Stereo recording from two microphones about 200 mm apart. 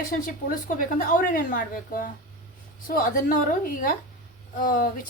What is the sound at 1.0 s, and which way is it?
A woman's voice, 45° left (ahead or behind).